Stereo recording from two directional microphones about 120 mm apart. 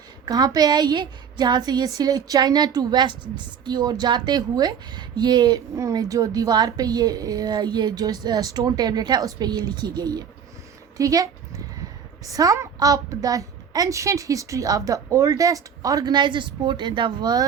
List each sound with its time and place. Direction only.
0.3 s a woman's voice: 30° right (ahead or behind)
10.9 s dog: 30° right (ahead or behind)
12.2 s a woman's voice: 30° right (ahead or behind)